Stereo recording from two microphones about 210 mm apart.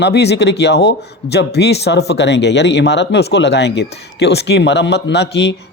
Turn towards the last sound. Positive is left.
turn(degrees=55)  # may be behind; listen again after turning